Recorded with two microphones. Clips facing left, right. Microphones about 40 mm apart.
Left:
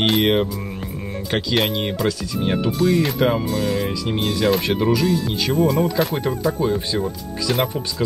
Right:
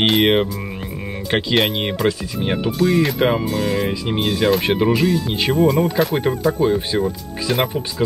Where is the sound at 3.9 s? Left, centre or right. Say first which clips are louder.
Right 2 dB; right.